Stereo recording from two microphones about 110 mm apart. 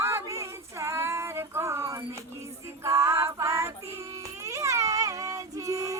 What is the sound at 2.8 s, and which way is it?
Music, 25° right (ahead or behind).